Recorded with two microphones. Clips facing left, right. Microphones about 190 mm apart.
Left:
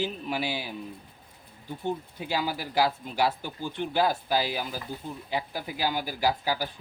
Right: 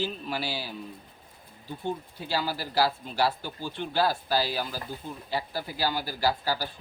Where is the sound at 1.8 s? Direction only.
15° left (ahead or behind).